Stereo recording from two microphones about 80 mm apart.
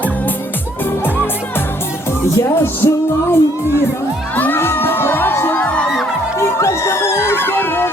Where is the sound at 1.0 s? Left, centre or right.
Left.